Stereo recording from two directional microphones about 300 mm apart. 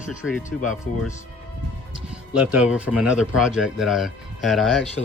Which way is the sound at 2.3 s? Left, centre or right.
Centre.